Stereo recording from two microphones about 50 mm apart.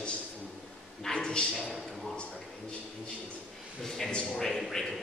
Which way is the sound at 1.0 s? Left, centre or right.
Centre.